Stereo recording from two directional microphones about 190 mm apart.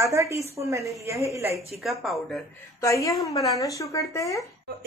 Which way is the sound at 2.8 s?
15° left (ahead or behind).